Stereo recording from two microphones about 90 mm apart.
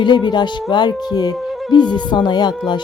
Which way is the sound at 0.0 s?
55° left (ahead or behind).